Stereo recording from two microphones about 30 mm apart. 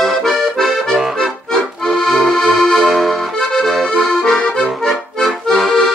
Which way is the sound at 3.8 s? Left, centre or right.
Centre.